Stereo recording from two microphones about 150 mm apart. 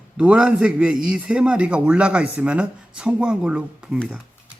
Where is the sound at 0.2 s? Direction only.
5° right (ahead or behind).